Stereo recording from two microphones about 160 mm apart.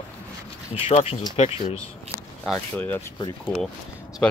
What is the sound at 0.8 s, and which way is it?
Speech, 40° left (ahead or behind).